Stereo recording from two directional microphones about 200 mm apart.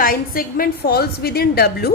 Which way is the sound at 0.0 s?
45° left (ahead or behind).